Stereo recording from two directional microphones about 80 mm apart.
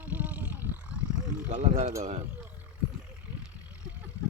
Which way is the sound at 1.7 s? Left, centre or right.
Right.